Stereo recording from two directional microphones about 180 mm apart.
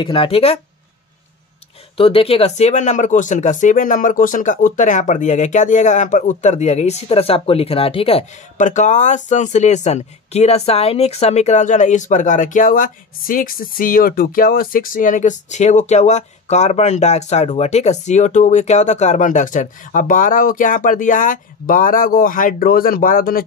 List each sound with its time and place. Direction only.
0.0 s speech: 30° left (ahead or behind)
2.0 s speech: 30° left (ahead or behind); by 23.4 s 50° left (ahead or behind)